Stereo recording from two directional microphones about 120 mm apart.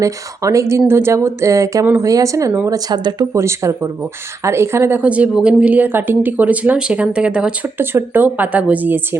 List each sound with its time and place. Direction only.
0.0 s speech: 25° right (ahead or behind)
3.3 s speech: 25° right (ahead or behind)